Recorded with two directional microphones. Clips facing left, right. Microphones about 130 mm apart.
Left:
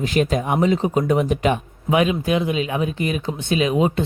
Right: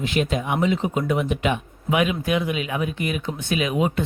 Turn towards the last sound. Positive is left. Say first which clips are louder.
# left 4 dB
turn(degrees=30)  # may be behind; listen again after turning